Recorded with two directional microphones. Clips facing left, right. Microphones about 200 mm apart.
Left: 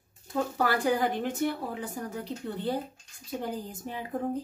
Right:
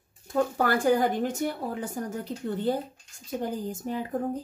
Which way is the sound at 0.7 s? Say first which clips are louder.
Right 3 dB; 45° right (ahead or behind).